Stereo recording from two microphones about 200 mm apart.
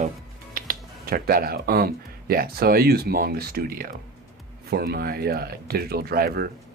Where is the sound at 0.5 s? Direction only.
45° right (ahead or behind).